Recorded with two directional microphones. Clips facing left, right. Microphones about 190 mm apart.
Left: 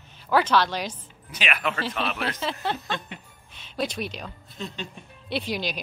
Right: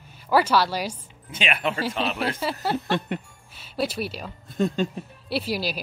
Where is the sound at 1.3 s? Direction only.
30° right (ahead or behind).